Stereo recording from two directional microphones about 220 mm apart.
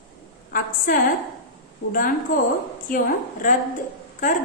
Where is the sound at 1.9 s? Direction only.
40° left (ahead or behind).